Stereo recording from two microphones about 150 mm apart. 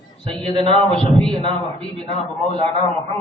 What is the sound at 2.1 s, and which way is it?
Speech, 40° right (ahead or behind).